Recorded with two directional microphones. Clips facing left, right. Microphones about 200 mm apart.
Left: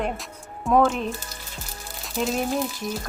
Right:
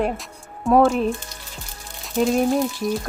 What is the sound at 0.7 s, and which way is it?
Speech, 30° right (ahead or behind).